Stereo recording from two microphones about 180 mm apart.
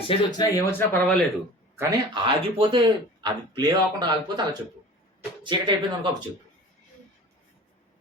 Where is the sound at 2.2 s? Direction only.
30° right (ahead or behind).